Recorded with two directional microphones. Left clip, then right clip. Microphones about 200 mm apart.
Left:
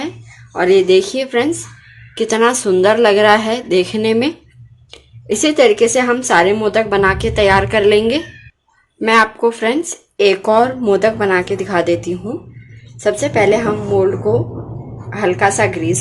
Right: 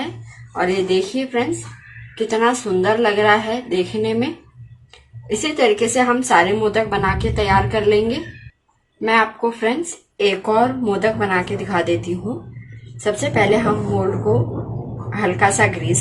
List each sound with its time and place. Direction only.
0.5 s a woman's voice: 45° left (ahead or behind)
15.1 s a woman's voice: 40° left (ahead or behind)